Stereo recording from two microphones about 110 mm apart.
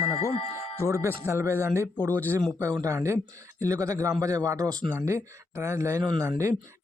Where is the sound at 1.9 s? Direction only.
15° left (ahead or behind).